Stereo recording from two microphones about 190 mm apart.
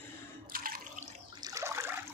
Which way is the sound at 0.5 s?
50° right (ahead or behind).